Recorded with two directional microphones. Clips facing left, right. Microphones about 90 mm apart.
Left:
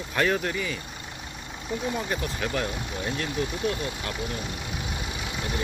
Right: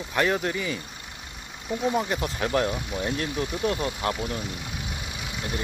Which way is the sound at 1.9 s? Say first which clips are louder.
Right 4 dB; 20° right (ahead or behind).